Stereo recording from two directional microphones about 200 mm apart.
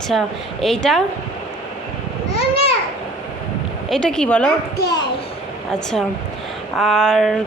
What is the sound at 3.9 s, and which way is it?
Speech, 5° left (ahead or behind).